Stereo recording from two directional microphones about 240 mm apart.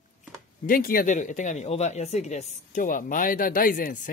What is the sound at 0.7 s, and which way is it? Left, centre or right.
Speech, left.